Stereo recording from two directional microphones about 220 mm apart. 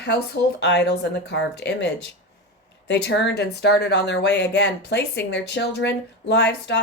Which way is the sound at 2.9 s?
55° left (ahead or behind).